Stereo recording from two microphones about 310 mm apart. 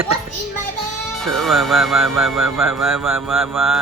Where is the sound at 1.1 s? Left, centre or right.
Centre.